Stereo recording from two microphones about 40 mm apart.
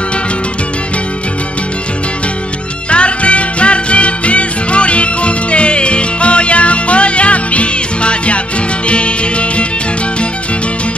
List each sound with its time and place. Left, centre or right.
2.9 s music: left